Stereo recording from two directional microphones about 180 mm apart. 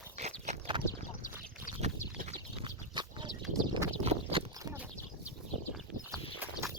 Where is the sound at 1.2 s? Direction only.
45° left (ahead or behind).